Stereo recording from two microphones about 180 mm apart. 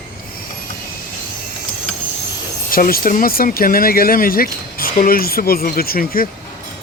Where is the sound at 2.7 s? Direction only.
55° left (ahead or behind).